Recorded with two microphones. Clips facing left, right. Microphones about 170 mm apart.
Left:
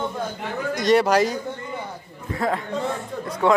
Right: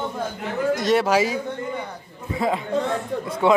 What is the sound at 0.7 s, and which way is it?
Speech, centre (ahead or behind).